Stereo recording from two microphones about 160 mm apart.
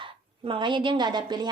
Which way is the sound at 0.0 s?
30° right (ahead or behind).